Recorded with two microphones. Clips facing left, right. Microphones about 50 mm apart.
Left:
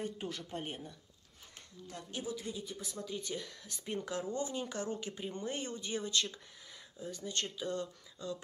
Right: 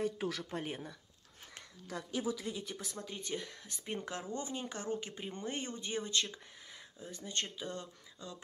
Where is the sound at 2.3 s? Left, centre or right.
Right.